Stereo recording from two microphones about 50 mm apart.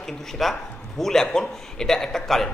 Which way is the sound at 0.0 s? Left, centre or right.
Centre.